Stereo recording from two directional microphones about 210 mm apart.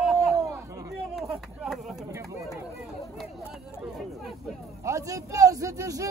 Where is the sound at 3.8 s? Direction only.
Centre (ahead or behind).